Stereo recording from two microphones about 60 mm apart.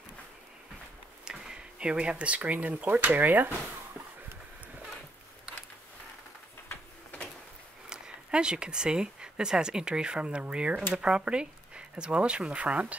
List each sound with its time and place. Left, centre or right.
1.2 s speech: centre; by 3.5 s right
7.9 s speech: centre